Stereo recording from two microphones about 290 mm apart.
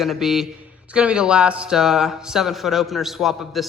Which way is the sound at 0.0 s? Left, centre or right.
Centre.